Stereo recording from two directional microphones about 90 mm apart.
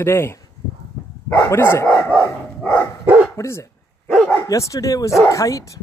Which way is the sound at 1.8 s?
15° left (ahead or behind).